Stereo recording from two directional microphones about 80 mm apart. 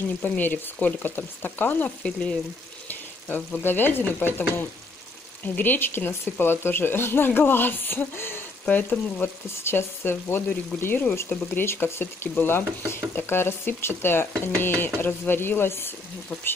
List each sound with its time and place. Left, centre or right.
0.2 s speech: left
2.9 s frying: left
5.4 s speech: left